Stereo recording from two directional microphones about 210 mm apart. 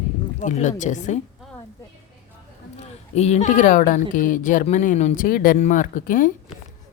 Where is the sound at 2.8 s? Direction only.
30° left (ahead or behind).